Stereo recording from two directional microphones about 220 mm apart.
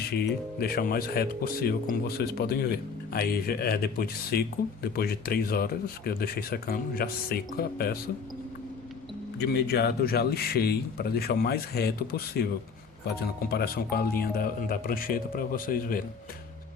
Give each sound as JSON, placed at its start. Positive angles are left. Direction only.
{"t": 0.6, "sound": "speech", "side_deg": 45}
{"t": 9.4, "sound": "speech", "side_deg": 50}